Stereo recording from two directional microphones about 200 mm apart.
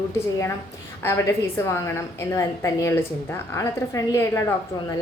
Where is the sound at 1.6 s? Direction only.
15° left (ahead or behind).